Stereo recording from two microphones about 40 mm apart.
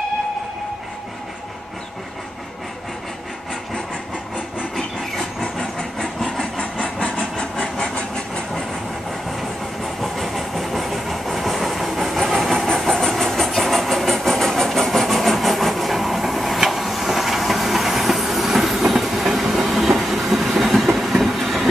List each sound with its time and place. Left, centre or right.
4.7 s train: centre
5.4 s vehicle: centre
6.4 s a sound: left
10.0 s train: centre
12.6 s vehicle: centre